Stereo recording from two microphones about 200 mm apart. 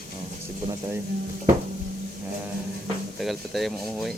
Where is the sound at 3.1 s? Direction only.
Centre (ahead or behind).